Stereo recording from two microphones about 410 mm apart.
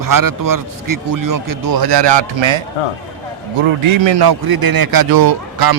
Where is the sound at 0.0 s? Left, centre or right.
Right.